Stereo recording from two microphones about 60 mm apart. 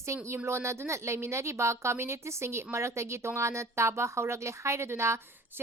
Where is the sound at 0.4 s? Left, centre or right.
Right.